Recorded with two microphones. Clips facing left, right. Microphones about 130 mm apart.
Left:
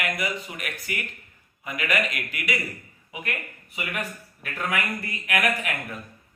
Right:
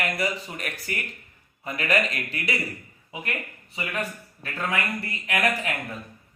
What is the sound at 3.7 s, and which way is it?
Speech, 30° right (ahead or behind).